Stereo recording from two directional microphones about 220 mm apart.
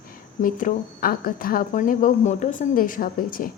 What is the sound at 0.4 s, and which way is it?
A woman's voice, 35° left (ahead or behind).